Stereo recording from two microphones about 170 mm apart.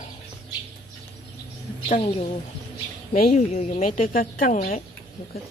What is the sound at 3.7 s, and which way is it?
A woman's voice, 55° left (ahead or behind).